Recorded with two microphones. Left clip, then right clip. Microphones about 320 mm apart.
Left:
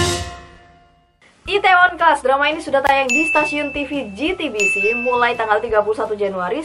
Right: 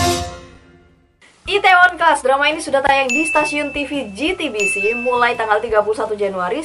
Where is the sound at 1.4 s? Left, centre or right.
Centre.